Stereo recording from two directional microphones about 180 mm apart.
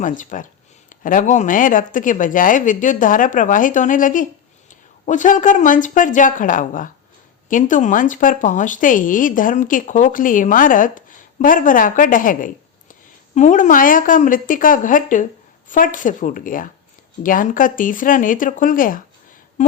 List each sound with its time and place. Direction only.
0.0 s speech: 45° left (ahead or behind)